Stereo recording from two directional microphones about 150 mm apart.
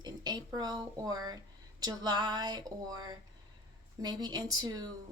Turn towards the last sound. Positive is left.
turn(degrees=-25)  # may be behind; listen again after turning